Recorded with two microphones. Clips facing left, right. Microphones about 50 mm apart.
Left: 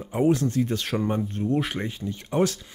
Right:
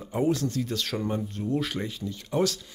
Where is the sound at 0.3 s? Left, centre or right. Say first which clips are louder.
Left 4 dB; left.